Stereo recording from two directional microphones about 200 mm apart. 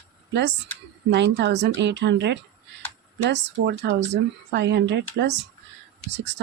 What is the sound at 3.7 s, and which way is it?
Speech, 60° right (ahead or behind).